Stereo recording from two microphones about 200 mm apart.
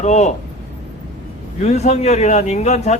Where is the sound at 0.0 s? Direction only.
35° left (ahead or behind).